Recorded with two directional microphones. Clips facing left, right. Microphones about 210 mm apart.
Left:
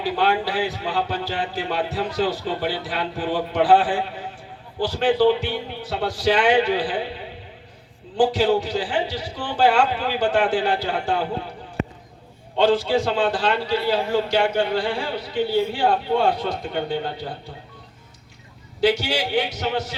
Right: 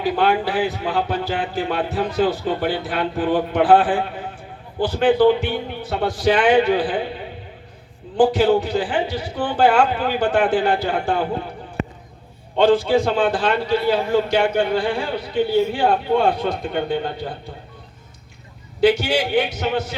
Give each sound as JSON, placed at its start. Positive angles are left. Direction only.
{"t": 0.0, "sound": "speech", "side_deg": -50}
{"t": 12.5, "sound": "speech", "side_deg": -50}
{"t": 18.8, "sound": "speech", "side_deg": -50}